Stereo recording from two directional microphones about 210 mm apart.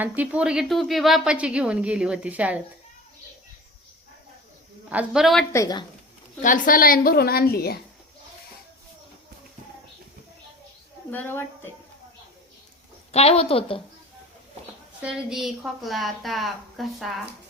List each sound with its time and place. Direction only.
0.0 s a woman's voice: 5° right (ahead or behind)
4.9 s a woman's voice: 5° right (ahead or behind)
5.5 s a woman's voice: 20° left (ahead or behind)
6.4 s a woman's voice: 40° left (ahead or behind)
11.1 s a woman's voice: 10° left (ahead or behind)
13.1 s a woman's voice: 30° left (ahead or behind)
15.0 s a woman's voice: centre (ahead or behind)